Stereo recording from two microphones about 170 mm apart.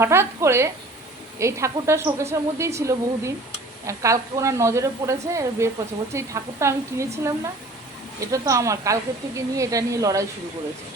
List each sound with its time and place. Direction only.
0.0 s a woman's voice: 15° right (ahead or behind)